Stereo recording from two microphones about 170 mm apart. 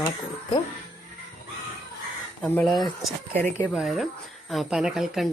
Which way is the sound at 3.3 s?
10° left (ahead or behind).